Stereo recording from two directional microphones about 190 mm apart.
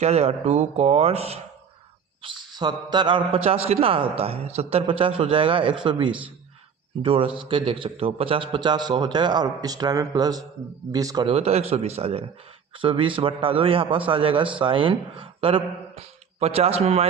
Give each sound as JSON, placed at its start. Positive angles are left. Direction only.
{"t": 0.0, "sound": "a man's voice", "side_deg": -35}